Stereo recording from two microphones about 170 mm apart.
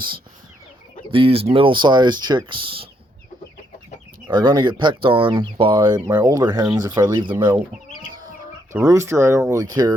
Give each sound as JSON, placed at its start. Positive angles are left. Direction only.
{"t": 1.1, "sound": "speech", "side_deg": -35}
{"t": 4.3, "sound": "speech", "side_deg": -25}
{"t": 8.7, "sound": "speech", "side_deg": -15}